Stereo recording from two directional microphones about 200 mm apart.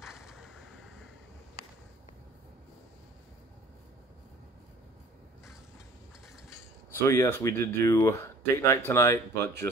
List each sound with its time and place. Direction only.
0.0 s vehicle: centre (ahead or behind)
7.1 s speech: 15° left (ahead or behind)